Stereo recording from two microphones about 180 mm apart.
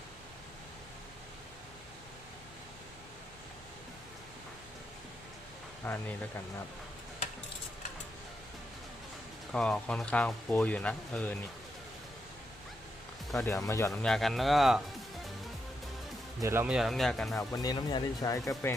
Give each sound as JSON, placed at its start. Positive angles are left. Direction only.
{"t": 5.8, "sound": "speech", "side_deg": 10}
{"t": 9.5, "sound": "speech", "side_deg": 5}
{"t": 13.3, "sound": "speech", "side_deg": 15}
{"t": 13.9, "sound": "speech", "side_deg": 5}
{"t": 16.4, "sound": "speech", "side_deg": -15}
{"t": 17.5, "sound": "speech", "side_deg": 20}